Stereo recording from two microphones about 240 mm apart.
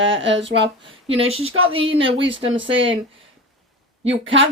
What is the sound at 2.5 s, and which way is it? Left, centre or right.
Speech, right.